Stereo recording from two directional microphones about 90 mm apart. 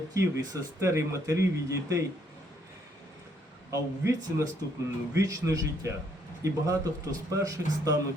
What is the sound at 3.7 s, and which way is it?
A man's voice, 40° right (ahead or behind).